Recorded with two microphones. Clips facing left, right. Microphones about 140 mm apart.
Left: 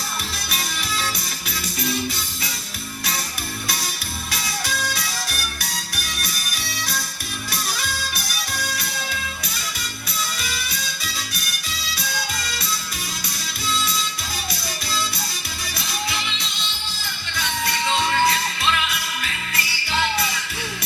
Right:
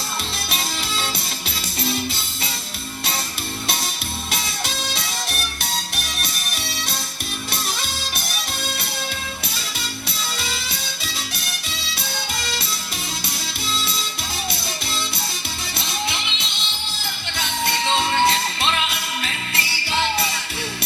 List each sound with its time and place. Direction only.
0.5 s music: 25° right (ahead or behind)
4.3 s music: 25° right (ahead or behind)
10.4 s music: 25° right (ahead or behind)
15.8 s music: 25° right (ahead or behind)